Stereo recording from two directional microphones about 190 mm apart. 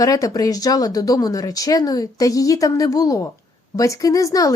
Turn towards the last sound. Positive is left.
turn(degrees=20)  # may be behind; listen again after turning